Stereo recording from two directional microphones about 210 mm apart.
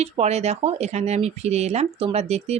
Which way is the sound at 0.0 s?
30° right (ahead or behind).